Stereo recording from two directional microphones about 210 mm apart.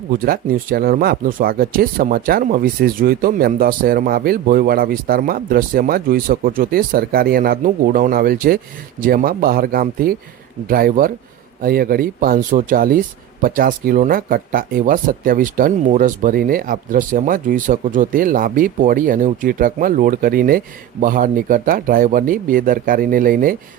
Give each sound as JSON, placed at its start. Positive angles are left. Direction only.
{"t": 0.1, "sound": "speech", "side_deg": -40}